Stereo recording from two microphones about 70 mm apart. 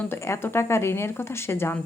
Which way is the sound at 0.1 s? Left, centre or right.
Left.